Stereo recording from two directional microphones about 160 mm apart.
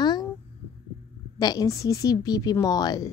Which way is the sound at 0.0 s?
25° left (ahead or behind).